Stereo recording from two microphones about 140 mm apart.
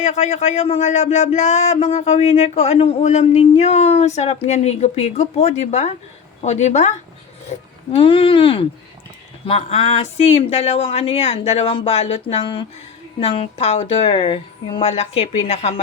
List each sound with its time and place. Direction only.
0.0 s a woman's voice: 55° left (ahead or behind)
7.9 s speech: 40° left (ahead or behind)